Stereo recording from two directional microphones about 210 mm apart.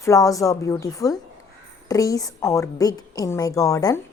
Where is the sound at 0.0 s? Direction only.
15° left (ahead or behind).